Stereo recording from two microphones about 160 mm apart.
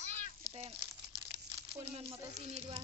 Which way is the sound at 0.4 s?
35° right (ahead or behind).